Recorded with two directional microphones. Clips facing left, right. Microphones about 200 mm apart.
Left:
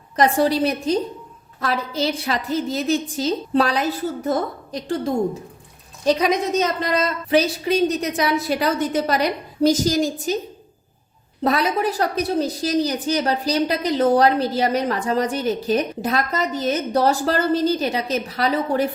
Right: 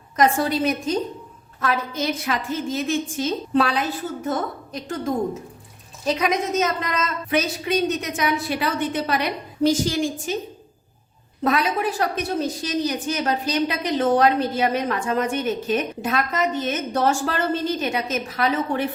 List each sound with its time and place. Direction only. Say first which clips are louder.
0.2 s a woman's voice: left 2 dB; 35° left (ahead or behind)
6.1 s a woman's voice: left 3 dB; 35° left (ahead or behind)
11.4 s a woman's voice: left 2 dB; 40° left (ahead or behind)